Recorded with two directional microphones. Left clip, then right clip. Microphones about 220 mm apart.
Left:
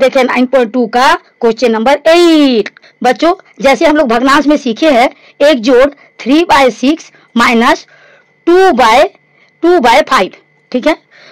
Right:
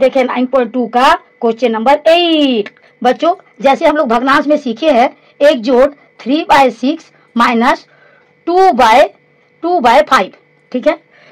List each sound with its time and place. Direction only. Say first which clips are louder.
0.0 s a woman's voice: left 3 dB; 40° left (ahead or behind)